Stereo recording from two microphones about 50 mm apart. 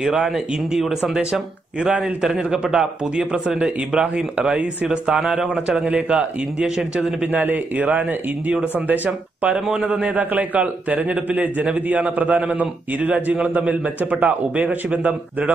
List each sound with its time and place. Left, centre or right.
0.0 s a man's voice: centre
1.8 s a man's voice: centre
7.3 s a man's voice: right